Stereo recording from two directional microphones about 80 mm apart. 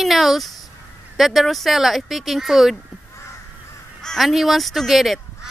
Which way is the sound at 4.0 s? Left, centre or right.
Centre.